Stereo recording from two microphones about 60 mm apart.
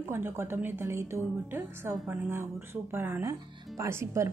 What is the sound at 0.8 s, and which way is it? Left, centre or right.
A woman's voice, right.